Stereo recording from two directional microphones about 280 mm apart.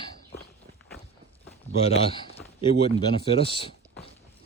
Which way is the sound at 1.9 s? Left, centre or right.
Centre.